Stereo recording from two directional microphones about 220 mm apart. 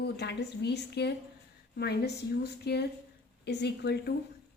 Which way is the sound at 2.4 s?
50° left (ahead or behind).